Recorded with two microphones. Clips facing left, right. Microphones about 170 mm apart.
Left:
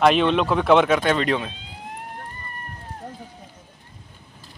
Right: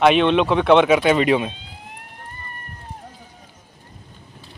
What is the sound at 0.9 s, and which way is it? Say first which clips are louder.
Speech: right 4 dB; 10° right (ahead or behind).